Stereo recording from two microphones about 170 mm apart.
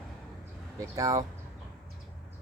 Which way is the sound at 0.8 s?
20° right (ahead or behind).